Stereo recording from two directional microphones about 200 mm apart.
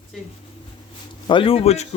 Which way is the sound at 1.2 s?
25° left (ahead or behind).